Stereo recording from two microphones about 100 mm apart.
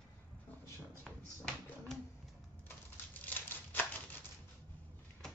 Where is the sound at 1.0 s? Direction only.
10° left (ahead or behind).